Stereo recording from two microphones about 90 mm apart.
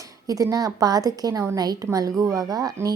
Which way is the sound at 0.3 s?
40° right (ahead or behind).